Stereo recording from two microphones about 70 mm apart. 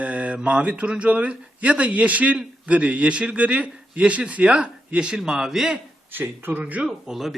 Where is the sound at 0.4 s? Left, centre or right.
Centre.